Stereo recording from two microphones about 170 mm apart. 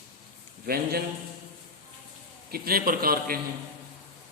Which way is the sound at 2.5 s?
60° right (ahead or behind).